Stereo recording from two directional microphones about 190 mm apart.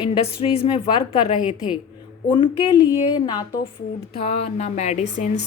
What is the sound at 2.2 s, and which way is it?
Speech, 25° left (ahead or behind).